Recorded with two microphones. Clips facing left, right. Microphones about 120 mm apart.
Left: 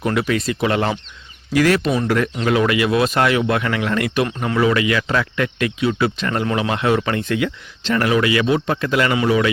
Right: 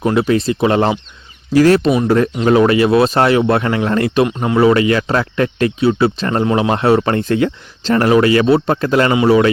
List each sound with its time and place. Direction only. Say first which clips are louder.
0.0 s speech: right 6 dB; 25° right (ahead or behind)